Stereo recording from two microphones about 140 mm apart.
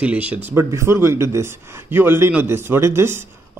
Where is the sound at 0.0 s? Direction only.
10° right (ahead or behind).